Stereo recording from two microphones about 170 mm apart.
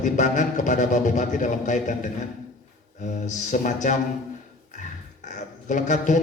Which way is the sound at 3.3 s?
45° left (ahead or behind).